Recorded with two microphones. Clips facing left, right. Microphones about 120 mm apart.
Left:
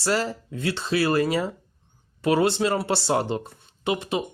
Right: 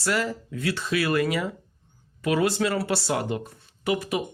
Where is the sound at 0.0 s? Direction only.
30° left (ahead or behind).